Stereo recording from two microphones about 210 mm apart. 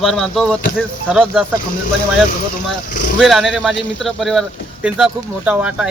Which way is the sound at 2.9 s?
40° left (ahead or behind).